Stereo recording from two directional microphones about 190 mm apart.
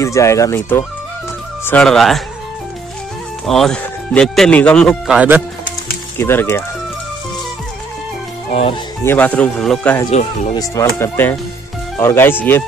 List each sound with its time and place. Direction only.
0.0 s speech: 15° left (ahead or behind)
3.4 s speech: centre (ahead or behind)
6.1 s speech: 10° left (ahead or behind)
8.5 s speech: 30° left (ahead or behind)
9.0 s speech: 10° left (ahead or behind)
10.1 s speech: 40° left (ahead or behind)
10.5 s speech: 15° left (ahead or behind)